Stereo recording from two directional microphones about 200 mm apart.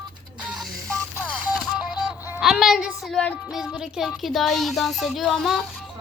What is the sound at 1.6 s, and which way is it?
Child singing, 5° right (ahead or behind).